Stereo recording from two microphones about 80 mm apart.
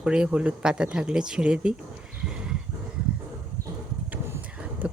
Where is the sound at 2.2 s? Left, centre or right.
Centre.